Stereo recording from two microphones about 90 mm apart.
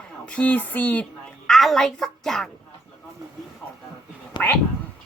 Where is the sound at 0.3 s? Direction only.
15° left (ahead or behind).